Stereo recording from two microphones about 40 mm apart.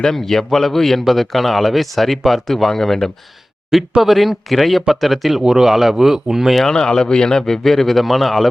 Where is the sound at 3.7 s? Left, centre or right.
Centre.